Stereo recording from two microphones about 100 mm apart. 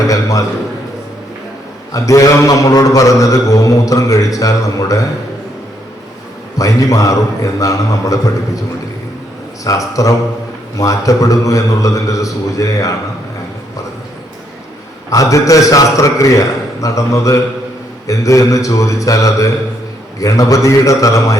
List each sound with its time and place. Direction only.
0.1 s a man's voice: 35° left (ahead or behind)
1.9 s a man's voice: 35° left (ahead or behind)
6.6 s a man's voice: 35° left (ahead or behind)
9.6 s a man's voice: 35° left (ahead or behind)
15.1 s a man's voice: 35° left (ahead or behind)